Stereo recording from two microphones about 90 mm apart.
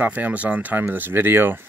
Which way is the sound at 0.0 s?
15° right (ahead or behind).